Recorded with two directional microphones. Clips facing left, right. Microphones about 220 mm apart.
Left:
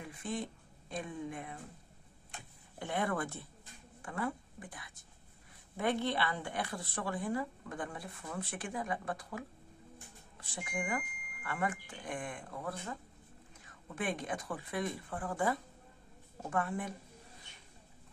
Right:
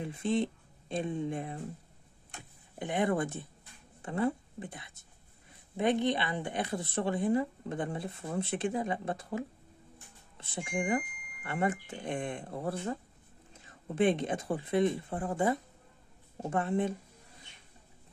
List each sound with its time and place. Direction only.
0.0 s speech: 25° right (ahead or behind)
2.8 s speech: 20° right (ahead or behind)